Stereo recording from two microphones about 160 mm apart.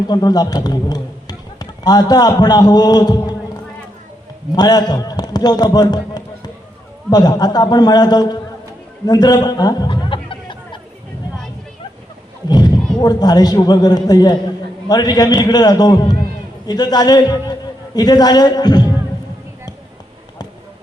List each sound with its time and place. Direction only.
0.1 s a man's voice: 25° left (ahead or behind)
4.5 s a man's voice: 25° left (ahead or behind)
9.0 s a sound: 25° left (ahead or behind)
12.5 s a man's voice: 25° left (ahead or behind)